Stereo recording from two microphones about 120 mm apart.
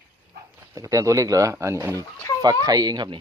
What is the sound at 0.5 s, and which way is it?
Speech, 25° right (ahead or behind).